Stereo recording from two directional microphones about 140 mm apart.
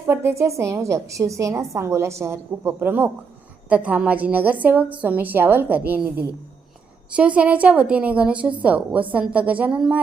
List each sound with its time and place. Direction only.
0.1 s a woman's voice: 15° right (ahead or behind)